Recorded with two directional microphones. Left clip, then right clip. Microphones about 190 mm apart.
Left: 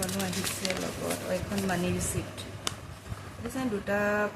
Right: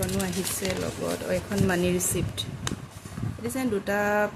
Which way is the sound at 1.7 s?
40° right (ahead or behind).